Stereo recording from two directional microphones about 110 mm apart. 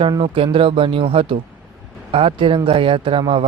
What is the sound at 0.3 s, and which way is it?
Speech, 55° right (ahead or behind).